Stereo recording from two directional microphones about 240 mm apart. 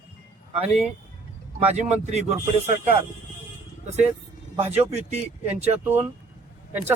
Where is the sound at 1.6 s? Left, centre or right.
Right.